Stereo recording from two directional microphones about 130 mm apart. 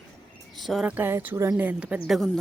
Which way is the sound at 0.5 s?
Centre (ahead or behind).